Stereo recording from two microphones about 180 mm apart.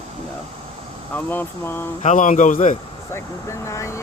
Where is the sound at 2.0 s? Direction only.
45° left (ahead or behind).